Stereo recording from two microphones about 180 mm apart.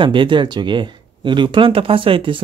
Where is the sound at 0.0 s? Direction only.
25° right (ahead or behind).